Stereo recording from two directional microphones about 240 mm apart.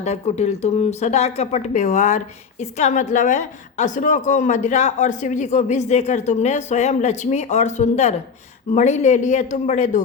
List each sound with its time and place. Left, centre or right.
0.0 s speech: left